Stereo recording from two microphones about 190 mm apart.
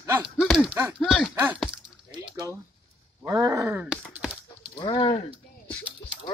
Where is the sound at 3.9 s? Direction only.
Centre (ahead or behind).